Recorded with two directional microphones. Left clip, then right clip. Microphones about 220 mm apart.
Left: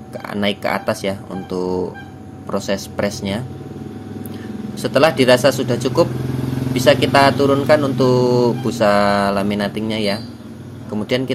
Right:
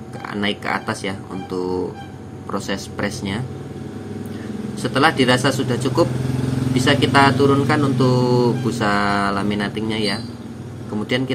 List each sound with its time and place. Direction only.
0.3 s speech: 30° left (ahead or behind)
4.7 s speech: 30° left (ahead or behind)